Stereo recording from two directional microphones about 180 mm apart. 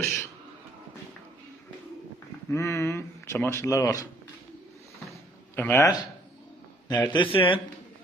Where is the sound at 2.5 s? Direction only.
15° left (ahead or behind).